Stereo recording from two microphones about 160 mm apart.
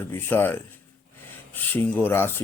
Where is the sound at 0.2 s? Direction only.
10° left (ahead or behind).